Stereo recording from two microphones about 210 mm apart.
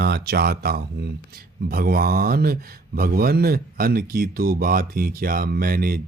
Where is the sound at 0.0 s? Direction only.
50° right (ahead or behind).